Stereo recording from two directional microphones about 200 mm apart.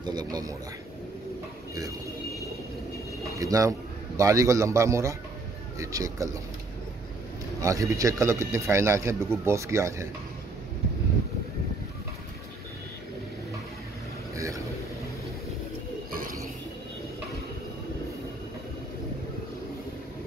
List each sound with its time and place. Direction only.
0.0 s speech: 20° right (ahead or behind)
3.3 s speech: 15° right (ahead or behind)
7.6 s speech: 15° right (ahead or behind)
14.3 s vehicle: 15° right (ahead or behind)